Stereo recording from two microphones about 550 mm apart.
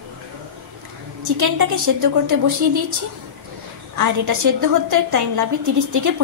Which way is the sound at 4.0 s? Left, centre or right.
Right.